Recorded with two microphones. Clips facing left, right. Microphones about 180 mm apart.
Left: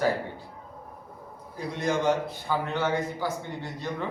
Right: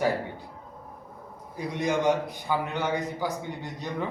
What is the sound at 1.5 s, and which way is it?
A man's voice, 15° right (ahead or behind).